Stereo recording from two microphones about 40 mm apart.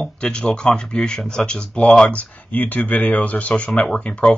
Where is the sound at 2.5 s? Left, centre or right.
Left.